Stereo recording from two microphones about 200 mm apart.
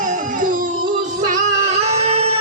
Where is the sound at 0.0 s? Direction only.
40° right (ahead or behind).